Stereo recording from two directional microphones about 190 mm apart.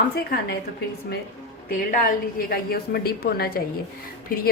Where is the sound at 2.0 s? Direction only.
50° left (ahead or behind).